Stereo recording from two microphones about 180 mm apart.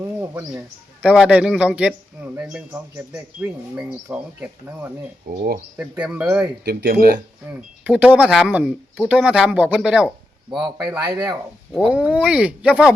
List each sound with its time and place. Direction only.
0.2 s speech: 15° right (ahead or behind)
5.3 s speech: 60° right (ahead or behind)
6.0 s speech: 5° right (ahead or behind)
6.7 s speech: 60° right (ahead or behind)
7.5 s speech: 5° right (ahead or behind)
10.6 s speech: 20° right (ahead or behind)
11.7 s speech: 5° right (ahead or behind)